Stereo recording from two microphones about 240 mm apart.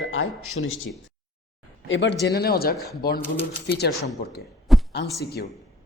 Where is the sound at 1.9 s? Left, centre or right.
Left.